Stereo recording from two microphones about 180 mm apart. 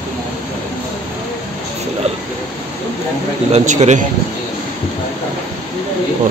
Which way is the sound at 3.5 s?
40° right (ahead or behind).